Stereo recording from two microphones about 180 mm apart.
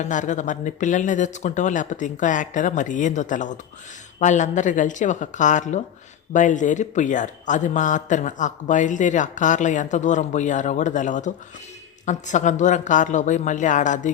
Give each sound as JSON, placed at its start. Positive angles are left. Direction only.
{"t": 0.0, "sound": "speech", "side_deg": 45}